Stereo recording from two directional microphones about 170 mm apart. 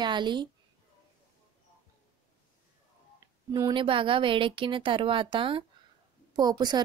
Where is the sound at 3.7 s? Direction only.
30° right (ahead or behind).